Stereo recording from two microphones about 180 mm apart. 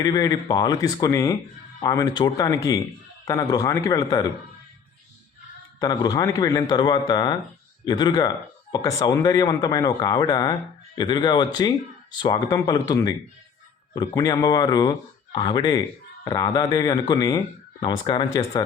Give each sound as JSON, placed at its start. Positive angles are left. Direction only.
{"t": 0.0, "sound": "speech", "side_deg": 20}
{"t": 5.8, "sound": "speech", "side_deg": 20}